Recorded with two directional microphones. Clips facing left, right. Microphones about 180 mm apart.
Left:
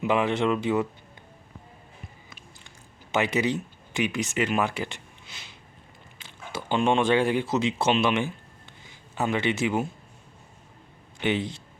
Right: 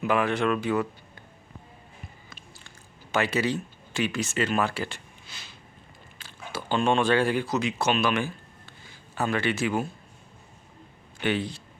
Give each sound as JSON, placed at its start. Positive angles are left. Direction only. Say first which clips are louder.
{"t": 0.0, "sound": "speech", "louder": "left 1 dB", "side_deg": 25}
{"t": 2.3, "sound": "chewing", "louder": "even", "side_deg": 20}
{"t": 6.1, "sound": "speech", "louder": "even", "side_deg": 20}
{"t": 11.2, "sound": "speech", "louder": "left 1 dB", "side_deg": 20}